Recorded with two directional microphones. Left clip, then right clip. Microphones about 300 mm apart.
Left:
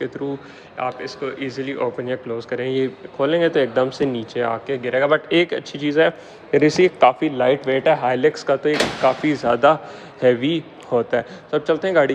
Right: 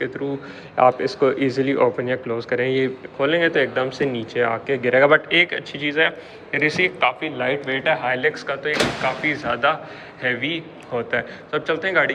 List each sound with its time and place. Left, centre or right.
0.0 s speech: centre